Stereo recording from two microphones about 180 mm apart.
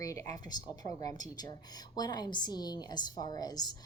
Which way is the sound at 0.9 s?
20° left (ahead or behind).